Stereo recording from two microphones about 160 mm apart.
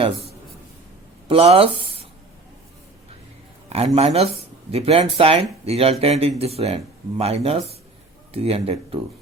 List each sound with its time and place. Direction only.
0.0 s a sound: 40° right (ahead or behind)
1.3 s speech: 35° right (ahead or behind)
3.7 s speech: 40° right (ahead or behind)